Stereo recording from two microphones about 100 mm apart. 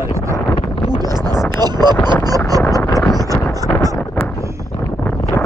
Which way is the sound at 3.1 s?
35° right (ahead or behind).